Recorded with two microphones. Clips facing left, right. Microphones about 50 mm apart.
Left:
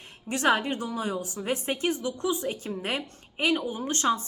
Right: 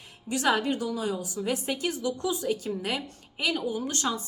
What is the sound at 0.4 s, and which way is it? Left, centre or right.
A woman's voice, left.